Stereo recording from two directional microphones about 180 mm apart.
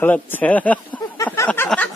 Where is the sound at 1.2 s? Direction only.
10° left (ahead or behind).